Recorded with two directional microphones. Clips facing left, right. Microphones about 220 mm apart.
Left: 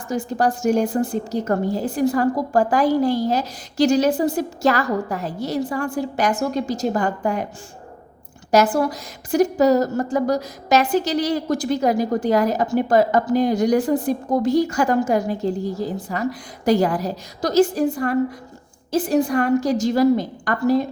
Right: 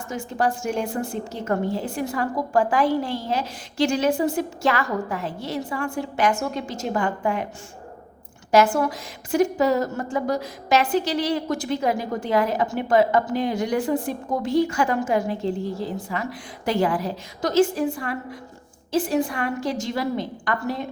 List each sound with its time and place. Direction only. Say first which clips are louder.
0.1 s a woman's voice: left 4 dB; 35° left (ahead or behind)
8.5 s a woman's voice: left 1 dB; 35° left (ahead or behind)